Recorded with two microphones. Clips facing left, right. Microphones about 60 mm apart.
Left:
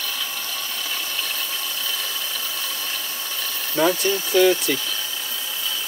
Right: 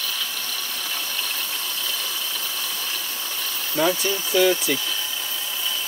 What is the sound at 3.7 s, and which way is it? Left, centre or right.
Speech, centre.